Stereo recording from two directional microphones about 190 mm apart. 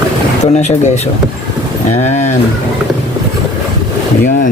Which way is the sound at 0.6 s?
35° left (ahead or behind).